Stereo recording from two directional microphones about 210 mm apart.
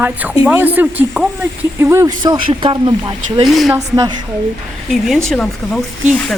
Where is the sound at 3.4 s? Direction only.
Centre (ahead or behind).